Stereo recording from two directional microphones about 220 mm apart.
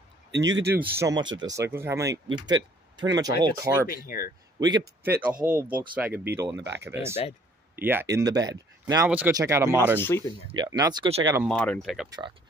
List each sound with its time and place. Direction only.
0.3 s speech: 55° right (ahead or behind)
0.7 s speech: 10° right (ahead or behind)
3.9 s speech: 40° left (ahead or behind)
4.6 s a man's voice: 20° right (ahead or behind)
5.3 s speech: 40° right (ahead or behind)
5.6 s speech: 10° right (ahead or behind)
6.5 s speech: 55° right (ahead or behind)
6.8 s speech: 10° right (ahead or behind)
9.9 s speech: 10° left (ahead or behind)
10.5 s speech: 20° right (ahead or behind)
11.4 s speech: 5° left (ahead or behind)